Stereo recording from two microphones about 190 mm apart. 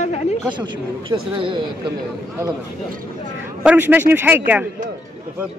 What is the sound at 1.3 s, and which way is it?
Speech, 25° right (ahead or behind).